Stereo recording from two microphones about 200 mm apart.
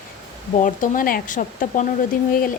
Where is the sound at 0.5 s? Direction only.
40° left (ahead or behind).